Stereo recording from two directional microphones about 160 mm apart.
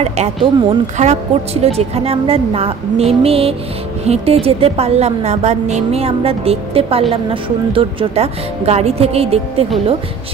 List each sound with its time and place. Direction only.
0.0 s a woman's voice: 40° right (ahead or behind)